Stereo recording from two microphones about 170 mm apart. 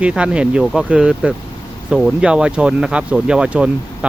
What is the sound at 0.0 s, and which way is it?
Speech, 5° right (ahead or behind).